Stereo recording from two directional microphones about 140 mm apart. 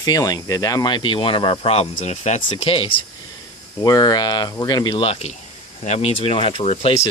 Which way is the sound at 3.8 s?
30° left (ahead or behind).